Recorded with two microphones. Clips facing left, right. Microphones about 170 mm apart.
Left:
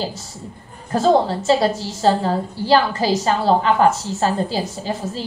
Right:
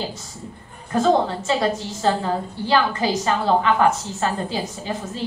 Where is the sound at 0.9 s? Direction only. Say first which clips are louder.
Left 2 dB; 35° left (ahead or behind).